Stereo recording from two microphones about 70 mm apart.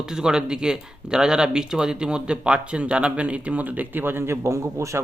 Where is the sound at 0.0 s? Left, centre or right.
Centre.